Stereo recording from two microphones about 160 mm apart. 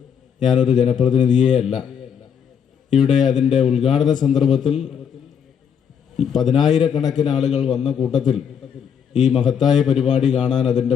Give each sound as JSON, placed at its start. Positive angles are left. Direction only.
{"t": 0.4, "sound": "a man's voice", "side_deg": 0}
{"t": 1.2, "sound": "speech", "side_deg": 25}
{"t": 1.5, "sound": "a man's voice", "side_deg": 0}
{"t": 6.1, "sound": "a man's voice", "side_deg": 0}
{"t": 9.2, "sound": "a man's voice", "side_deg": 0}